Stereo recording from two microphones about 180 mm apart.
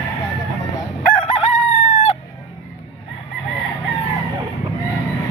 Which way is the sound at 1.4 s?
40° left (ahead or behind).